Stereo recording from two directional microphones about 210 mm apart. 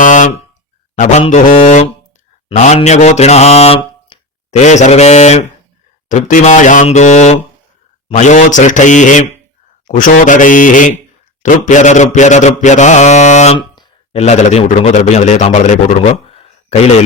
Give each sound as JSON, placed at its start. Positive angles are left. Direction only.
{"t": 0.0, "sound": "mantra", "side_deg": 35}